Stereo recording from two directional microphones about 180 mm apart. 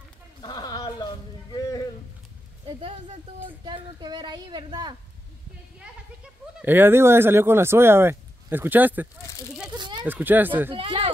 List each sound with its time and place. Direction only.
0.4 s a sound: 25° left (ahead or behind)
3.4 s a woman's voice: 25° right (ahead or behind)
6.6 s speech: 10° right (ahead or behind)
9.8 s a sound: 25° right (ahead or behind)
10.0 s speech: 10° right (ahead or behind)
10.7 s a woman's voice: 30° right (ahead or behind)